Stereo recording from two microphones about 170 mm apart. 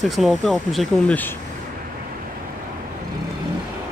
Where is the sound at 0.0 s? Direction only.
Centre (ahead or behind).